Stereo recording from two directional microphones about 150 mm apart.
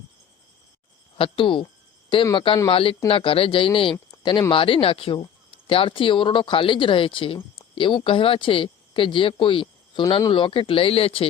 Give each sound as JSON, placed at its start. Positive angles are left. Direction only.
{"t": 1.2, "sound": "speech", "side_deg": 35}